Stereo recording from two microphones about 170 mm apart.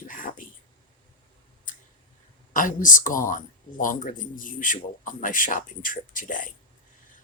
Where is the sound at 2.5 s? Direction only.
50° left (ahead or behind).